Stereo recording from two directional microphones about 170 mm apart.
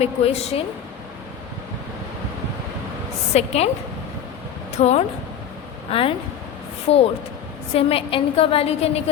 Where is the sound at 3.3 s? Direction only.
40° left (ahead or behind).